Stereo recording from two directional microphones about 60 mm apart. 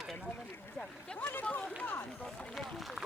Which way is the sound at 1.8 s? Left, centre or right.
Left.